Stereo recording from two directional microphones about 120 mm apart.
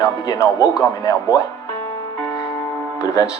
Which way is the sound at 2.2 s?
25° left (ahead or behind).